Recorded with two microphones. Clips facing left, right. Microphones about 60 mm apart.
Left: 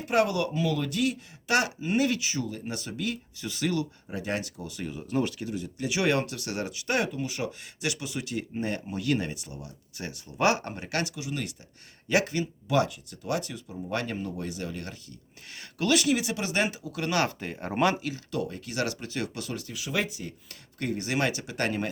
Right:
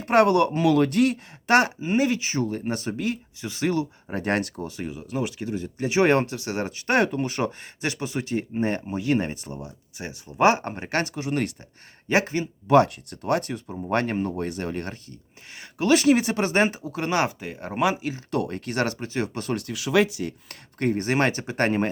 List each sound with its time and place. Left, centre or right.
0.0 s speech: right
1.8 s speech: right
2.3 s speech: right
4.1 s speech: right
4.9 s speech: centre
5.4 s speech: right
7.6 s speech: right
12.0 s speech: right
12.7 s speech: right
15.5 s speech: right
17.2 s speech: centre
18.3 s speech: right
19.5 s speech: right
20.7 s speech: right